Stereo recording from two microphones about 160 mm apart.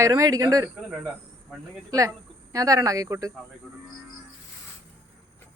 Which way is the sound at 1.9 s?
20° right (ahead or behind).